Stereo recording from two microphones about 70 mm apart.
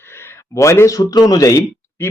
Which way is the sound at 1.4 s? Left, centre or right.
Left.